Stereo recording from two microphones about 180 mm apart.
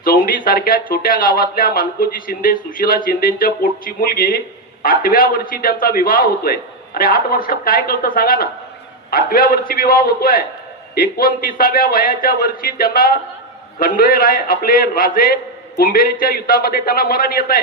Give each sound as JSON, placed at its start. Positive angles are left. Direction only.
{"t": 0.0, "sound": "speech", "side_deg": 55}